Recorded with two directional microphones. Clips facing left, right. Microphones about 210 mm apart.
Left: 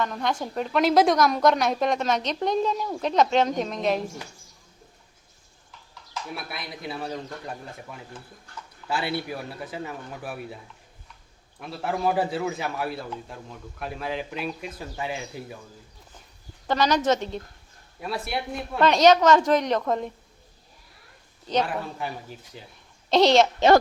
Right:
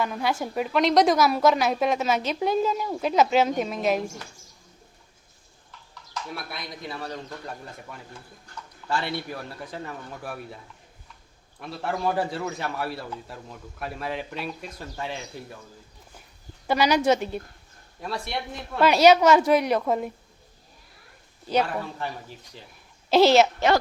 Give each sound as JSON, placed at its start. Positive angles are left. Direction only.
{"t": 0.0, "sound": "speech", "side_deg": -5}
{"t": 0.8, "sound": "a man's voice", "side_deg": 0}
{"t": 6.3, "sound": "a man's voice", "side_deg": 5}
{"t": 11.6, "sound": "a man's voice", "side_deg": 0}
{"t": 16.6, "sound": "speech", "side_deg": -10}
{"t": 18.0, "sound": "speech", "side_deg": 5}
{"t": 21.4, "sound": "speech", "side_deg": -10}
{"t": 21.7, "sound": "a man's voice", "side_deg": 5}